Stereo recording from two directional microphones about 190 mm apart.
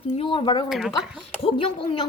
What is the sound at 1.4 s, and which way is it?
Speech, 25° left (ahead or behind).